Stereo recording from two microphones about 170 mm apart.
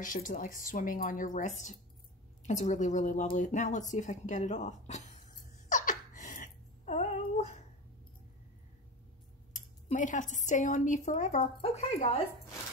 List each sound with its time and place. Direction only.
0.0 s speech: 50° left (ahead or behind)
5.7 s a sound: 50° left (ahead or behind)
9.5 s speech: 45° left (ahead or behind)